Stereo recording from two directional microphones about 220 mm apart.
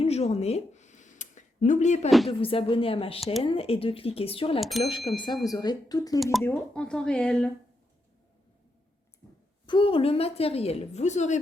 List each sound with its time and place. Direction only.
0.0 s a sound: 30° left (ahead or behind)
2.0 s speech: centre (ahead or behind)
2.4 s a woman's voice: 25° left (ahead or behind)
4.6 s speech: centre (ahead or behind)
5.1 s speech: 20° left (ahead or behind)
6.3 s speech: 5° left (ahead or behind)
9.6 s a woman's voice: 25° left (ahead or behind)